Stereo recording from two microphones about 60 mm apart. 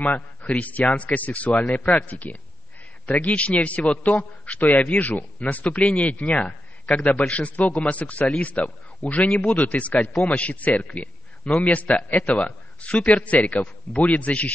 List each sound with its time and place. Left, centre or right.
0.6 s a man's voice: left